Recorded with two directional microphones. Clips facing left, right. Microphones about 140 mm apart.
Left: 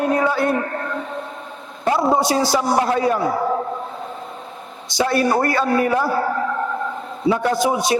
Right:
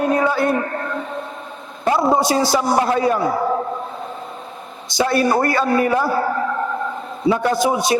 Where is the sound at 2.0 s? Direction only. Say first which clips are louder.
Right 1 dB; 30° right (ahead or behind).